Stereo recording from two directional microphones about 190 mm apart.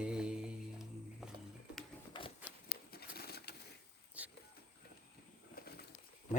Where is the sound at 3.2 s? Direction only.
55° left (ahead or behind).